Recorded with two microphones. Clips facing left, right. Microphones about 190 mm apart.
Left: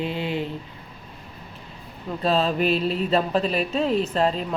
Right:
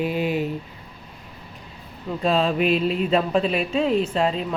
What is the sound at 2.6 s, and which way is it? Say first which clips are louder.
Speech: right 2 dB; 40° left (ahead or behind).